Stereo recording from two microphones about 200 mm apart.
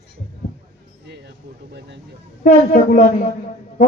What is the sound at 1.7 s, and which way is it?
Speech, 55° right (ahead or behind).